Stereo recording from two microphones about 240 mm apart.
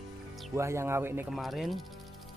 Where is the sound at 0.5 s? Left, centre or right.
Centre.